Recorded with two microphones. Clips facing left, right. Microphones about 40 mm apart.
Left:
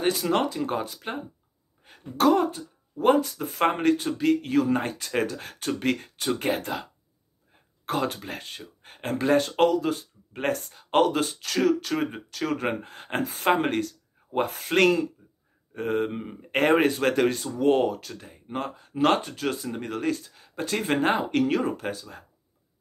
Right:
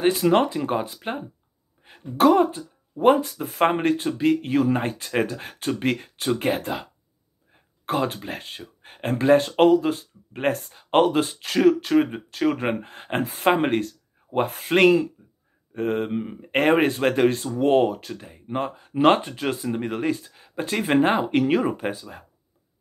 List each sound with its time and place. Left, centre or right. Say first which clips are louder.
0.0 s speech: right 5 dB; centre
0.9 s speech: right 3 dB; centre
3.3 s speech: right 3 dB; centre
3.7 s speech: right 1 dB; centre
18.9 s speech: right 4 dB; right